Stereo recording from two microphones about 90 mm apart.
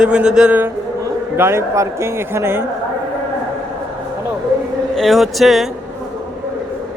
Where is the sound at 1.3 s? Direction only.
25° right (ahead or behind).